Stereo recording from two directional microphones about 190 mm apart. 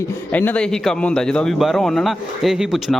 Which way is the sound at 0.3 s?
5° left (ahead or behind).